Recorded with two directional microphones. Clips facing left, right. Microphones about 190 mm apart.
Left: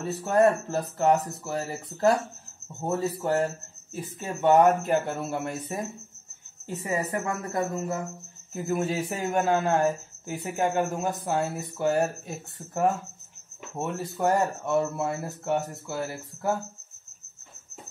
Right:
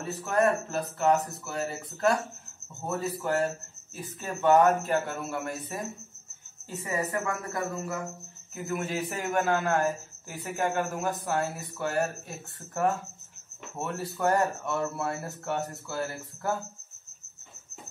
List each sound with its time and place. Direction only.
0.2 s a man's voice: 30° left (ahead or behind)
6.8 s a man's voice: 25° left (ahead or behind)
13.7 s a man's voice: 20° left (ahead or behind)